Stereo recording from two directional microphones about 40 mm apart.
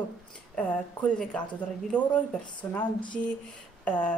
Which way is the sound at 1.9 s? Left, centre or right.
Left.